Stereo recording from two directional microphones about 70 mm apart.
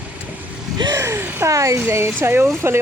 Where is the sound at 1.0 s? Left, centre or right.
Right.